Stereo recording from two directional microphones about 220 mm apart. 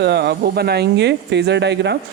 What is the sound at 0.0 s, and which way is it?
Speech, 50° right (ahead or behind).